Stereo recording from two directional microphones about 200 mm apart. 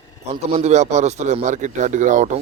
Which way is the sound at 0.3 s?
35° right (ahead or behind).